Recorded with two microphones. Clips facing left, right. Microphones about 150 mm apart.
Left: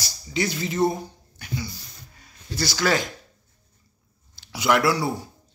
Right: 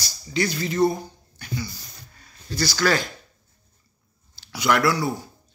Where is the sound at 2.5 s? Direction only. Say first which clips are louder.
Right 1 dB; 25° left (ahead or behind).